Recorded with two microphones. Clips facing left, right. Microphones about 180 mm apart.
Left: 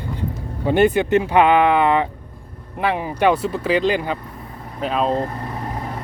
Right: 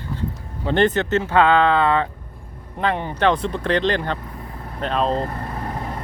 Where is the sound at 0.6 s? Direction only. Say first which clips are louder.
Left 3 dB; 10° left (ahead or behind).